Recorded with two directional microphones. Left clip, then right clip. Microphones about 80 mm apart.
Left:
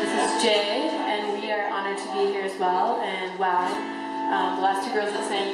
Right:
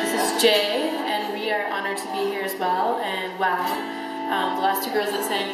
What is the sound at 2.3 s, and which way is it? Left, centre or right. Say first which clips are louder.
Music: even; right.